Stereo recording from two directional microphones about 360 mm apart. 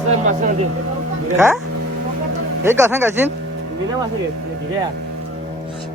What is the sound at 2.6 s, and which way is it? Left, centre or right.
Speech, centre.